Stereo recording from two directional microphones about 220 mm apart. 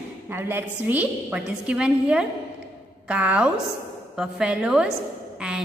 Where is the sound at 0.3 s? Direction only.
10° right (ahead or behind).